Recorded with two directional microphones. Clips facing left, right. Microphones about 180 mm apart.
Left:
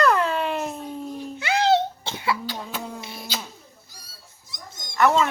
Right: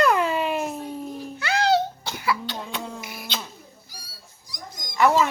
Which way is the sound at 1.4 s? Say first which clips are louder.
Left 1 dB; 20° left (ahead or behind).